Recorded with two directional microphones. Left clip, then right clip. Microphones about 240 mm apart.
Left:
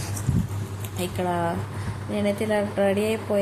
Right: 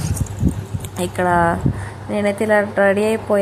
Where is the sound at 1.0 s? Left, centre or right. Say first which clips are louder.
Right 10 dB; centre.